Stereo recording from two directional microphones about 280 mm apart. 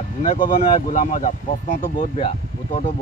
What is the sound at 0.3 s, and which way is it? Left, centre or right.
Speech, left.